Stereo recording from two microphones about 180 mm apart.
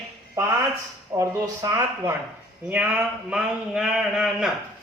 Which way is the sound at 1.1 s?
15° right (ahead or behind).